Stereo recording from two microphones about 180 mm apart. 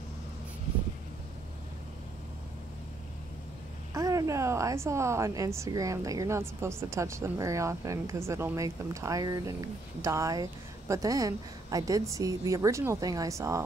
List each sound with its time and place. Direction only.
3.9 s a woman's voice: 20° right (ahead or behind)